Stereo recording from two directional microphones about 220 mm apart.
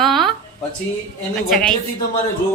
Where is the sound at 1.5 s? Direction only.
5° left (ahead or behind).